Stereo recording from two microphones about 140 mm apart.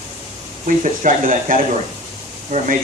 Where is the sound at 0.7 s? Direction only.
70° right (ahead or behind).